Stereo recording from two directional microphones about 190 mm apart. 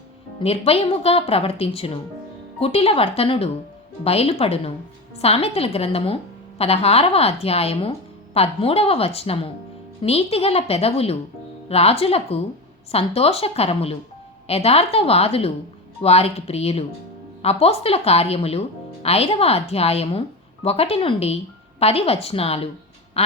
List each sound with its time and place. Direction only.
0.3 s speech: 30° left (ahead or behind)
23.2 s quack: 35° left (ahead or behind)